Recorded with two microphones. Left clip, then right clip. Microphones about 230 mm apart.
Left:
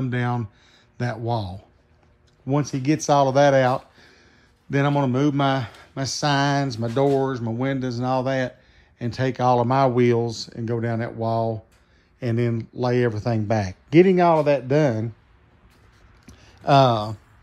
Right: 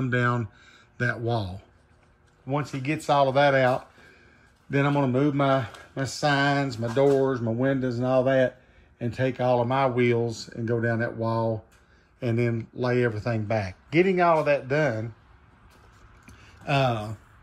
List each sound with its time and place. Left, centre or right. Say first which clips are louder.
0.0 s speech: right 1 dB; centre
2.4 s speech: left 4 dB; left
2.8 s speech: left 3 dB; centre
14.1 s speech: left 3 dB; left
16.3 s a sound: left 9 dB; centre